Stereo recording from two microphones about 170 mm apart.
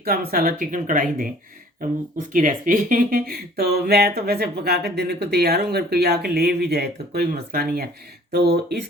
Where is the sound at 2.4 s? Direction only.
50° right (ahead or behind).